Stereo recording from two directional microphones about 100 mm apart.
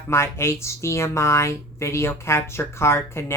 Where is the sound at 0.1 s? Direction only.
25° left (ahead or behind).